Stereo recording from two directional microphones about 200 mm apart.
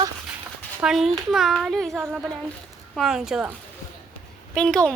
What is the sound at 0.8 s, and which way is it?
A child's voice, centre (ahead or behind).